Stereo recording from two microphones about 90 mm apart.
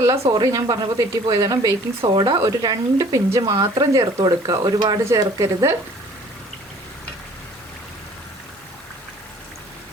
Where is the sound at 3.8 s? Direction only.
50° right (ahead or behind).